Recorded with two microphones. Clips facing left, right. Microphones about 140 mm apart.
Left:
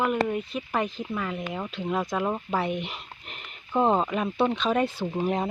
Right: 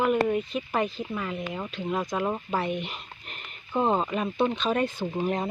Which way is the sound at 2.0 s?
Centre (ahead or behind).